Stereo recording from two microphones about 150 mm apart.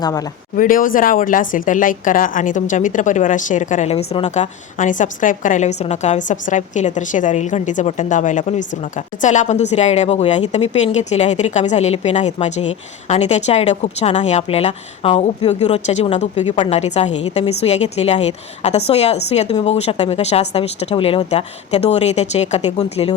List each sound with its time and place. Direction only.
0.0 s speech: 25° left (ahead or behind)
0.5 s a woman's voice: 65° left (ahead or behind); by 23.1 s 45° left (ahead or behind)